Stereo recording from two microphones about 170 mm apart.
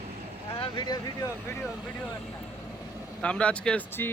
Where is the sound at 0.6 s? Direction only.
25° left (ahead or behind).